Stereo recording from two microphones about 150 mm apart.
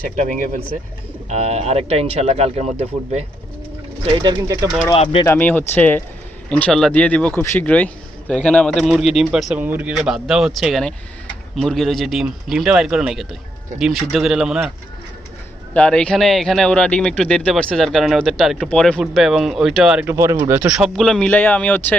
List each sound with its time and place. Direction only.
1.3 s speech: 45° right (ahead or behind)
4.0 s speech: 30° right (ahead or behind)
5.2 s speech: 15° left (ahead or behind); by 14.7 s 5° right (ahead or behind)
15.7 s speech: 5° left (ahead or behind)
20.1 s speech: 20° right (ahead or behind)
20.5 s speech: 10° right (ahead or behind); by 21.9 s 10° left (ahead or behind)